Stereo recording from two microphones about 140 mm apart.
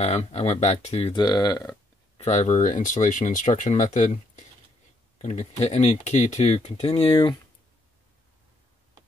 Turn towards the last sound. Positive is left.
turn(degrees=40)  # may be behind; listen again after turning